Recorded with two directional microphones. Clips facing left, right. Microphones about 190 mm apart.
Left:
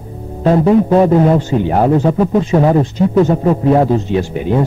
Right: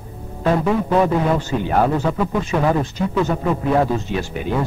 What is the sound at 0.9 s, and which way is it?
Speech, 35° left (ahead or behind).